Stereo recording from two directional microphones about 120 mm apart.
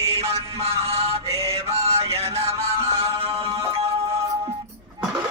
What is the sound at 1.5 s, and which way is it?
Music, 60° right (ahead or behind).